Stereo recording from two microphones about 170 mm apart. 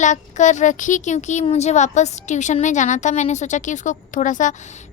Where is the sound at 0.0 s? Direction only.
45° left (ahead or behind).